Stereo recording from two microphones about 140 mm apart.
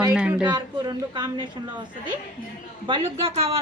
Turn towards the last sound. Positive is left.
turn(degrees=-45)  # may be behind; listen again after turning